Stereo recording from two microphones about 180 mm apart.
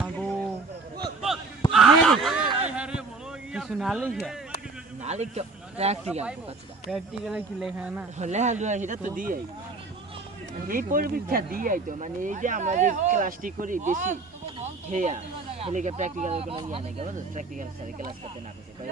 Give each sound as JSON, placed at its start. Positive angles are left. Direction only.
{"t": 1.7, "sound": "snicker", "side_deg": 0}
{"t": 2.6, "sound": "a sound", "side_deg": -5}
{"t": 3.5, "sound": "speech", "side_deg": -5}
{"t": 5.0, "sound": "speech", "side_deg": -40}
{"t": 6.9, "sound": "speech", "side_deg": 0}
{"t": 8.2, "sound": "speech", "side_deg": -40}
{"t": 10.7, "sound": "speech", "side_deg": -50}
{"t": 17.2, "sound": "speech", "side_deg": -45}